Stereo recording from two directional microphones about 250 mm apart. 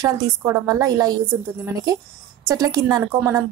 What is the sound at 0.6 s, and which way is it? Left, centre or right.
Speech, centre.